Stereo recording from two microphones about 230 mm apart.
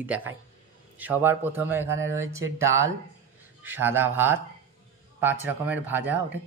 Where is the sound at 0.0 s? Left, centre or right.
Centre.